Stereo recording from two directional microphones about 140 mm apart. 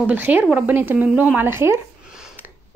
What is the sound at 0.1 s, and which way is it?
Speech, 15° right (ahead or behind).